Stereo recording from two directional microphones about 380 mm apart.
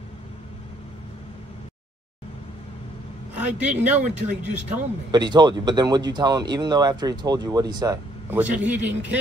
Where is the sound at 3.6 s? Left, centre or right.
Centre.